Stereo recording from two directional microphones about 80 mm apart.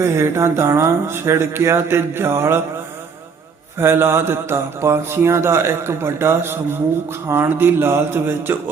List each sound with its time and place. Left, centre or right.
0.0 s speech: right
3.8 s speech: right